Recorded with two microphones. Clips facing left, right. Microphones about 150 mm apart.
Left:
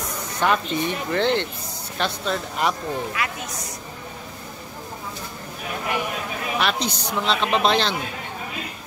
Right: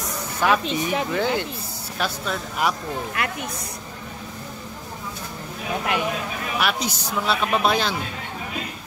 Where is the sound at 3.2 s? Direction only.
55° right (ahead or behind).